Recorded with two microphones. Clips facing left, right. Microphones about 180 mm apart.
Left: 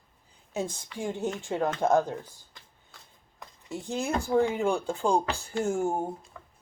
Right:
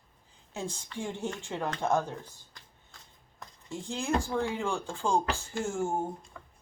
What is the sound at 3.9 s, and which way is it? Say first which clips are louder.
Speech: left 3 dB; 20° left (ahead or behind).